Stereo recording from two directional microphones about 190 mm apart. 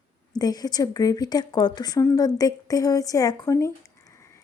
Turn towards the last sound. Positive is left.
turn(degrees=15)  # may be behind; listen again after turning